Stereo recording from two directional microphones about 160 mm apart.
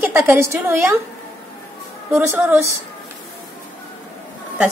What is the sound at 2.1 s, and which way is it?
Speech, 15° right (ahead or behind).